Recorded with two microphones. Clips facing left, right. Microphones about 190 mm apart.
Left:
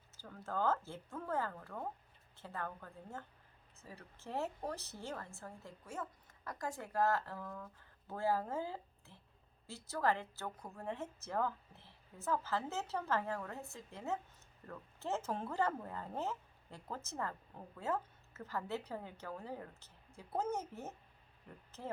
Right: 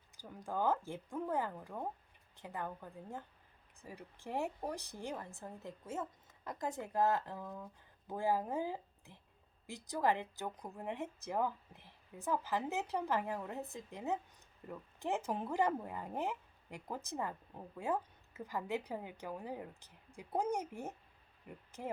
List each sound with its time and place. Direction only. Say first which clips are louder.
0.2 s speech: right 1 dB; 15° right (ahead or behind)